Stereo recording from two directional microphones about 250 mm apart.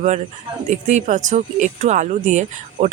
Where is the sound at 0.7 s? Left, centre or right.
Right.